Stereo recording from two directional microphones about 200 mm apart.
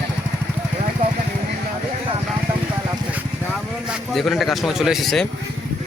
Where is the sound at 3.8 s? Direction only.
Centre (ahead or behind).